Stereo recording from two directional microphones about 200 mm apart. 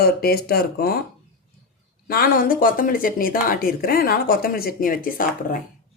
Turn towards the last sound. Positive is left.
turn(degrees=45)  # may be behind; listen again after turning